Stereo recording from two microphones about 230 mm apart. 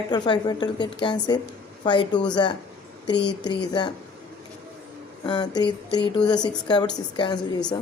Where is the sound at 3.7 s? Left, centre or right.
Centre.